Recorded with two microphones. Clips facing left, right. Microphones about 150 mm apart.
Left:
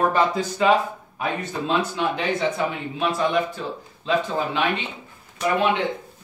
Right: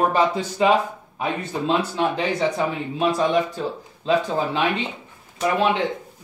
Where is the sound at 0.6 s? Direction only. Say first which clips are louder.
Right 1 dB; 20° right (ahead or behind).